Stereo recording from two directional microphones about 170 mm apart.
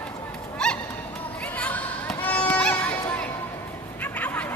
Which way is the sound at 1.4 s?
10° left (ahead or behind).